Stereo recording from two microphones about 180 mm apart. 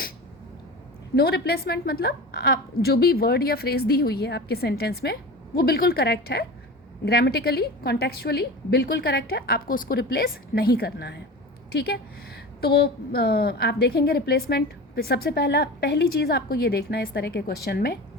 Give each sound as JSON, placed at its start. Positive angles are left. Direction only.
{"t": 1.1, "sound": "a woman's voice", "side_deg": 60}